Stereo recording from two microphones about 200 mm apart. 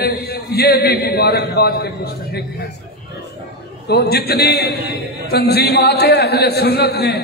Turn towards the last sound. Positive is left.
turn(degrees=55)  # may be behind; listen again after turning